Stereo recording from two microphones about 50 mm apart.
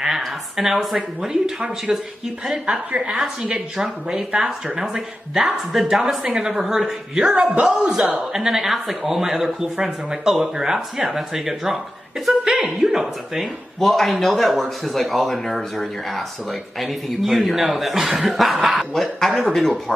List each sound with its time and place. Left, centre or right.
0.0 s a man's voice: centre
6.2 s a man's voice: centre
7.3 s a woman's voice: right
8.2 s a man's voice: centre
13.7 s speech: centre